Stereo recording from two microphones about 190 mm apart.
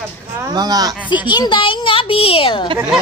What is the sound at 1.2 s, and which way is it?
A child's voice, 25° left (ahead or behind).